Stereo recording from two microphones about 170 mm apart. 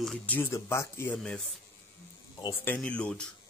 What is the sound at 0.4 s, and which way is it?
Speech, 15° left (ahead or behind).